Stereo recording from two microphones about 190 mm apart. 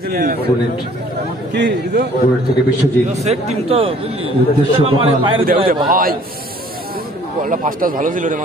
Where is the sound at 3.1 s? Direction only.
35° right (ahead or behind).